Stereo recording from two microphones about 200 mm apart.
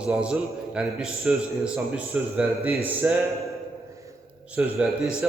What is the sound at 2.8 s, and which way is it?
Music, 10° right (ahead or behind).